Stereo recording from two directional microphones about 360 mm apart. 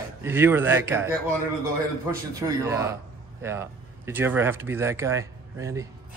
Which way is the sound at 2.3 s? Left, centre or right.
Centre.